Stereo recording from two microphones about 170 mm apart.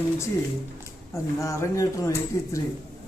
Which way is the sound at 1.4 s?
20° left (ahead or behind).